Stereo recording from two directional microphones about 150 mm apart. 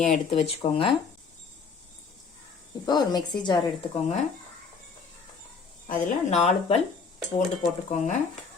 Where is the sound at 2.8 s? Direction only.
30° left (ahead or behind).